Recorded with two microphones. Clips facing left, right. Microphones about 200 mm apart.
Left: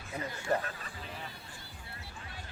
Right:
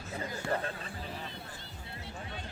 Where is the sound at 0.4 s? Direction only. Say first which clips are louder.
Left 2 dB; 60° right (ahead or behind).